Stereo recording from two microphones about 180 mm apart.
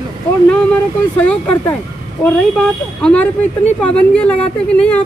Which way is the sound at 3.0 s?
5° left (ahead or behind).